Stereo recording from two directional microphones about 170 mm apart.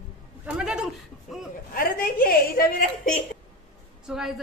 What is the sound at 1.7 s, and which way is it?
A woman's voice, 60° left (ahead or behind).